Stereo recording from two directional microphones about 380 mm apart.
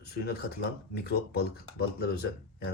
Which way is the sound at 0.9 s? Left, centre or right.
Left.